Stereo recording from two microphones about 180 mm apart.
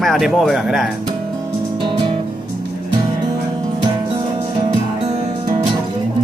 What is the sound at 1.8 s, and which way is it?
Music, 25° right (ahead or behind).